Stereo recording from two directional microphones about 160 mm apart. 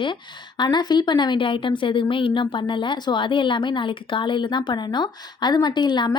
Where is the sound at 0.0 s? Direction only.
30° left (ahead or behind).